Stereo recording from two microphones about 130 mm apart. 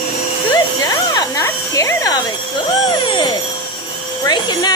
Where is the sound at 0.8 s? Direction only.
25° left (ahead or behind).